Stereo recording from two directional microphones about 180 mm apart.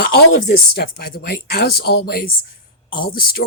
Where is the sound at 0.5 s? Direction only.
55° left (ahead or behind).